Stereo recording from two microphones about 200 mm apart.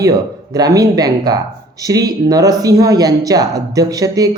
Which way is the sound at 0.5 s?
20° right (ahead or behind).